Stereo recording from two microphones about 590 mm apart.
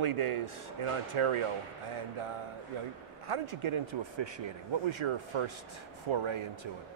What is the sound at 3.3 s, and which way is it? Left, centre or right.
Speech, right.